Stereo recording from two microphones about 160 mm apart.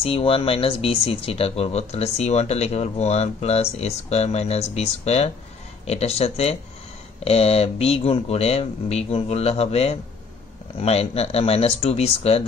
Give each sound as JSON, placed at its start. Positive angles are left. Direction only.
{"t": 0.0, "sound": "speech", "side_deg": 35}